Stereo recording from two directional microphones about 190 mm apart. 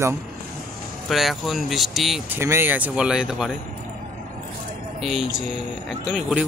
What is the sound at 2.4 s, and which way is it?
Speech, 10° right (ahead or behind).